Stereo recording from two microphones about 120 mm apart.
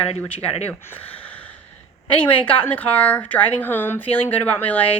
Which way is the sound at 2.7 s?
15° left (ahead or behind).